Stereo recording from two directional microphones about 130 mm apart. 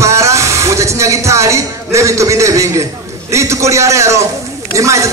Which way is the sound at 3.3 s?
20° right (ahead or behind).